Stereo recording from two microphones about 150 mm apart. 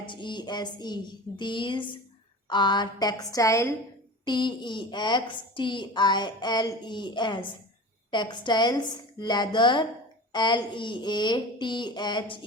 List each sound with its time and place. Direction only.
0.0 s a woman's voice: 30° left (ahead or behind)
4.3 s a woman's voice: 30° left (ahead or behind)